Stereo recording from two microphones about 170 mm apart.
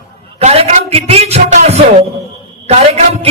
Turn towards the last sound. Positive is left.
turn(degrees=-40)  # may be behind; listen again after turning